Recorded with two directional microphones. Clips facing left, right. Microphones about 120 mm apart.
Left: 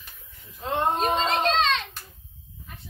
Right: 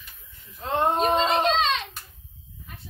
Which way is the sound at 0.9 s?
5° right (ahead or behind).